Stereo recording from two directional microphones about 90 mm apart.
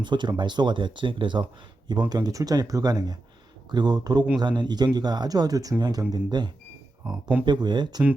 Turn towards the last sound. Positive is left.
turn(degrees=-55)  # may be behind; listen again after turning